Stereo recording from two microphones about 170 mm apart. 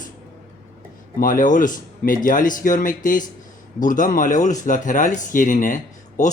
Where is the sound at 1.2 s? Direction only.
50° left (ahead or behind).